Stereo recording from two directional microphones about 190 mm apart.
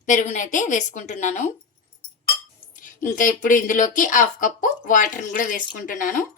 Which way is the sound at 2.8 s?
45° left (ahead or behind).